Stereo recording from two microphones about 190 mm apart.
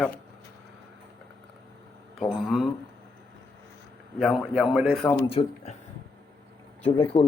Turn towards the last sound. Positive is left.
turn(degrees=30)  # may be behind; listen again after turning